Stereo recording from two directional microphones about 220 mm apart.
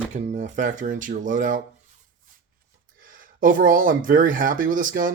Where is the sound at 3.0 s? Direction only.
40° right (ahead or behind).